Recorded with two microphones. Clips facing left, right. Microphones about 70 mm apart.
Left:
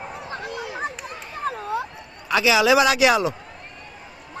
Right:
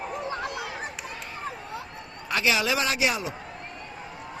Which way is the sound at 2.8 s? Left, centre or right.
Left.